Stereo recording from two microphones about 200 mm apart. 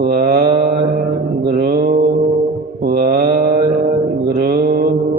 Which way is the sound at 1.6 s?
45° right (ahead or behind).